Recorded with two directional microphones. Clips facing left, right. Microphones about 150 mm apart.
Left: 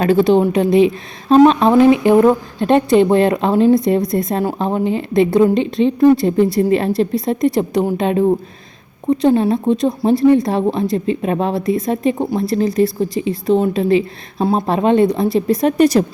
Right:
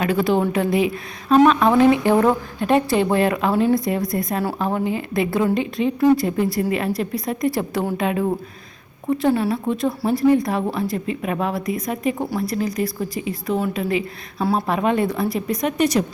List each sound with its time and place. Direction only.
0.0 s speech: 30° left (ahead or behind)
8.0 s speech: 30° left (ahead or behind)